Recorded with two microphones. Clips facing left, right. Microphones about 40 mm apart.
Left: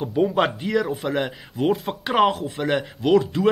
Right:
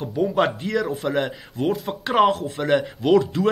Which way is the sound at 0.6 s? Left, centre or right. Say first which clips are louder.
Left 1 dB; centre.